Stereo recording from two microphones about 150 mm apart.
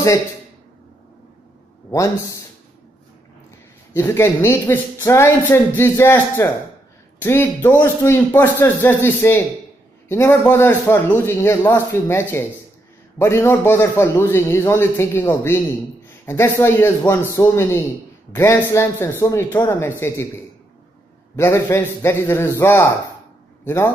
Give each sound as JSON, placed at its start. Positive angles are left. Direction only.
{"t": 1.9, "sound": "speech", "side_deg": 20}
{"t": 3.9, "sound": "speech", "side_deg": 15}
{"t": 21.4, "sound": "a man's voice", "side_deg": 20}